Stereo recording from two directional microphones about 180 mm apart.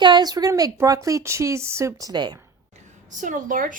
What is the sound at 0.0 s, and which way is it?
Speech, 25° right (ahead or behind).